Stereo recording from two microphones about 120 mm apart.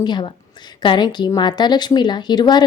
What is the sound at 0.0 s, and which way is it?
A woman's voice, 40° left (ahead or behind).